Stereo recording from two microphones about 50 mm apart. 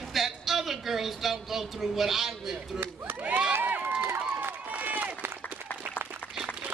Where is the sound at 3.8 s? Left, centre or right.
Right.